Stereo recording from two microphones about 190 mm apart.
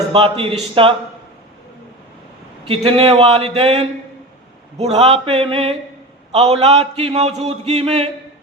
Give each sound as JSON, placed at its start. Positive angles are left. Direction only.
{"t": 0.1, "sound": "a man's voice", "side_deg": -30}
{"t": 2.6, "sound": "a man's voice", "side_deg": -30}